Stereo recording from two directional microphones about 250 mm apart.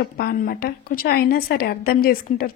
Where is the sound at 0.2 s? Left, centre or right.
Left.